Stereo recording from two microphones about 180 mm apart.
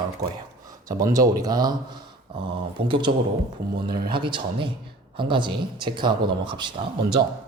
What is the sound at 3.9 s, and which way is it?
Speech, 60° right (ahead or behind).